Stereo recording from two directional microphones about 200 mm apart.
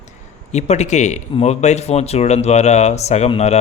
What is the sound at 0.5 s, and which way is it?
Speech, 35° left (ahead or behind).